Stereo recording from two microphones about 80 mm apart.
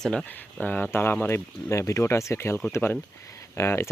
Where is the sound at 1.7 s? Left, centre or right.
Left.